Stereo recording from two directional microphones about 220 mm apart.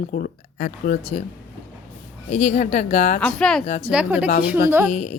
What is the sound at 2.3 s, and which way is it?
Speech, 35° left (ahead or behind).